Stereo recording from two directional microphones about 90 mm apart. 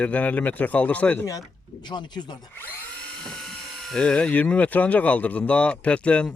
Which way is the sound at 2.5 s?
20° left (ahead or behind).